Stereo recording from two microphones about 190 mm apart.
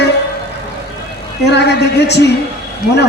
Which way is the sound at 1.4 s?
65° left (ahead or behind).